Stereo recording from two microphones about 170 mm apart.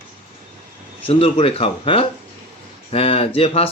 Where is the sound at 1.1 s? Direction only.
35° left (ahead or behind).